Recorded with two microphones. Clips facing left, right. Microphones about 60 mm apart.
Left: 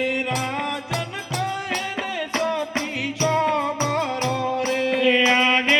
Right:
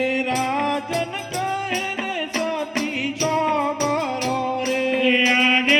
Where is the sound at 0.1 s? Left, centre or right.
Right.